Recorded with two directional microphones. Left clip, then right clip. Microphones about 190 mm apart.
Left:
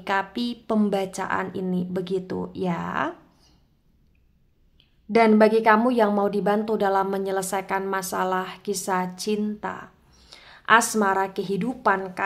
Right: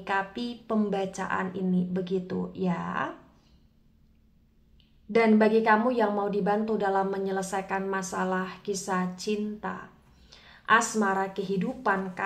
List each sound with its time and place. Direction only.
0.0 s a woman's voice: 35° left (ahead or behind)
5.1 s a woman's voice: 35° left (ahead or behind)